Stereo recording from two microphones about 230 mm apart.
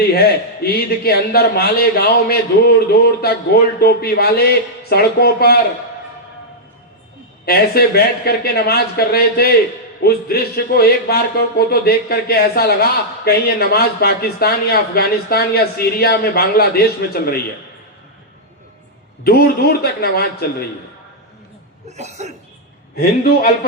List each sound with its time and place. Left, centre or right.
0.1 s speech: left
7.4 s speech: left
19.2 s speech: left
21.8 s speech: right